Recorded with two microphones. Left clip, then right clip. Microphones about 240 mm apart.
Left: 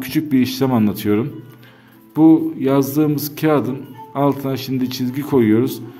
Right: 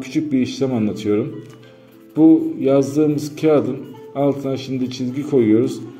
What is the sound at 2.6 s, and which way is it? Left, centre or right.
A man's voice, left.